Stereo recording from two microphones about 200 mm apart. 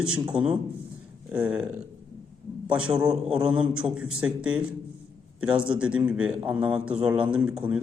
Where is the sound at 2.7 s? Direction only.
5° right (ahead or behind).